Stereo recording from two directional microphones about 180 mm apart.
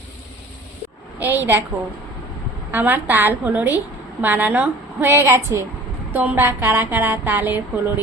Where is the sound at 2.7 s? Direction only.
10° right (ahead or behind).